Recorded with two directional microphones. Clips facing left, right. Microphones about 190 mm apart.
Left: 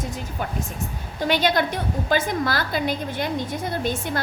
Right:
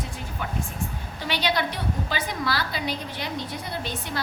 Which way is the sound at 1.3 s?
50° left (ahead or behind).